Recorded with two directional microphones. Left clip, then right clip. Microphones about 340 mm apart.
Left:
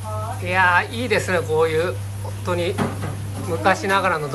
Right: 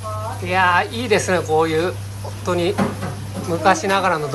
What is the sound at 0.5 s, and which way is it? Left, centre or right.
Speech, centre.